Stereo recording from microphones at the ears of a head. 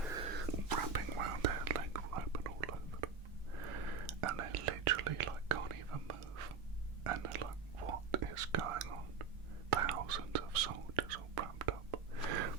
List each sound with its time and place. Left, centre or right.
0.1 s whispering: right